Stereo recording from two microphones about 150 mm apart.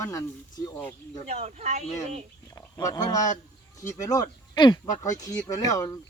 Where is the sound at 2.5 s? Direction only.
25° left (ahead or behind).